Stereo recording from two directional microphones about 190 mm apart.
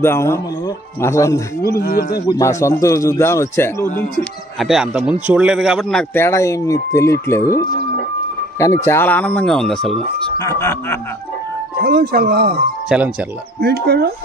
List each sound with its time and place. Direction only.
0.0 s a man's voice: 15° left (ahead or behind)
1.8 s speech: 55° left (ahead or behind)
2.2 s a man's voice: 15° left (ahead or behind)
4.2 s a man's voice: centre (ahead or behind)
10.4 s a man's voice: 15° left (ahead or behind)
11.8 s speech: 55° right (ahead or behind)
12.8 s speech: 5° right (ahead or behind)
13.6 s speech: 55° right (ahead or behind)